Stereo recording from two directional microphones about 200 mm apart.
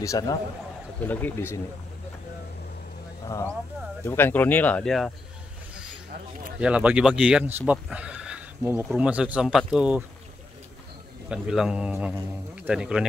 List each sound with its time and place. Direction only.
0.0 s speech: 15° left (ahead or behind)
3.3 s speech: 15° left (ahead or behind)
6.6 s speech: 5° right (ahead or behind)
11.2 s speech: 5° right (ahead or behind)